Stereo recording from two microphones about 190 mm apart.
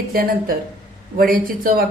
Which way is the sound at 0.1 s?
50° right (ahead or behind).